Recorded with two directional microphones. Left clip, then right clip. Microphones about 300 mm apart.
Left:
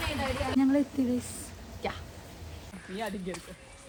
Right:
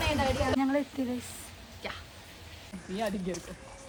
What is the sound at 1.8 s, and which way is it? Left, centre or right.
Hiccup, centre.